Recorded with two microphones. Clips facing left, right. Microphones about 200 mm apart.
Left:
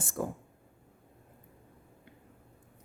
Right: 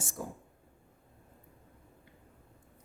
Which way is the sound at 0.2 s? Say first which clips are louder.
Left 7 dB; 65° left (ahead or behind).